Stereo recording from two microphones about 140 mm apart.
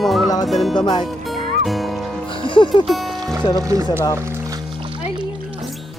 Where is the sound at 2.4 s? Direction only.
35° left (ahead or behind).